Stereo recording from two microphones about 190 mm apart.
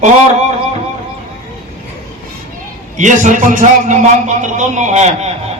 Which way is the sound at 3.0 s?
40° right (ahead or behind).